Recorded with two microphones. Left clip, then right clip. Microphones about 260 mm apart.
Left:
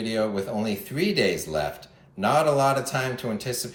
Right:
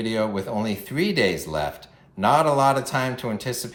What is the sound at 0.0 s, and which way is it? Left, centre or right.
Speech, centre.